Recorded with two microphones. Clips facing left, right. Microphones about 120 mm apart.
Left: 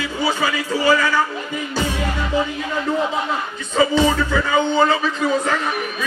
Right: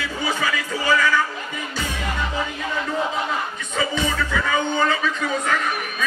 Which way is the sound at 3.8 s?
30° left (ahead or behind).